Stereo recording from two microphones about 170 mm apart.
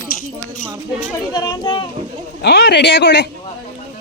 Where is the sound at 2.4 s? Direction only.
75° left (ahead or behind).